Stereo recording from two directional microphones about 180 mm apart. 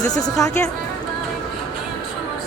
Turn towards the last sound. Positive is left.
turn(degrees=20)  # may be behind; listen again after turning